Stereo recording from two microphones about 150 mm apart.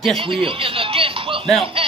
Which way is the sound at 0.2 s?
35° right (ahead or behind).